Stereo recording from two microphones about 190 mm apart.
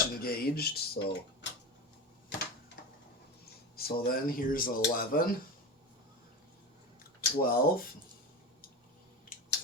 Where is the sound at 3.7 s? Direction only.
50° left (ahead or behind).